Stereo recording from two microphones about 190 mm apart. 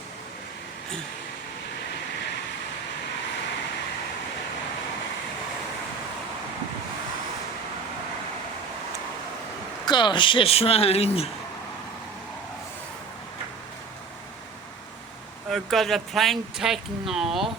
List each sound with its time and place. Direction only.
9.8 s speech: 25° left (ahead or behind)
15.4 s a woman's voice: centre (ahead or behind)